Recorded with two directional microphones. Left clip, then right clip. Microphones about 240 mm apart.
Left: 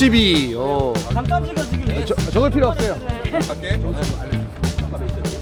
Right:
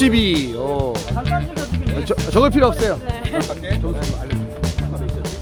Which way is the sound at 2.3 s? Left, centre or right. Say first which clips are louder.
Right 3 dB; right.